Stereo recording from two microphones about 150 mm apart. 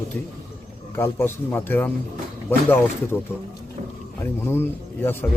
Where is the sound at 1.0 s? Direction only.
15° left (ahead or behind).